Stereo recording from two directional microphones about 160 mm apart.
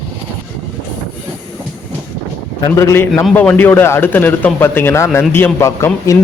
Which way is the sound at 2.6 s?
20° left (ahead or behind).